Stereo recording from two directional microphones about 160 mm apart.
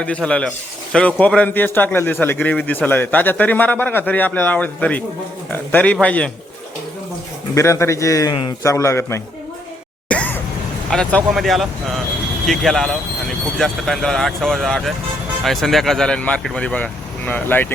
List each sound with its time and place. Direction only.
0.0 s a man's voice: 5° left (ahead or behind)
7.5 s a man's voice: 20° left (ahead or behind)
8.6 s a man's voice: 15° left (ahead or behind)
10.1 s a sound: 10° left (ahead or behind)
10.8 s speech: 5° left (ahead or behind)